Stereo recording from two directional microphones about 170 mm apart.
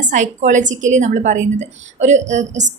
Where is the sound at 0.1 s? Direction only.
45° right (ahead or behind).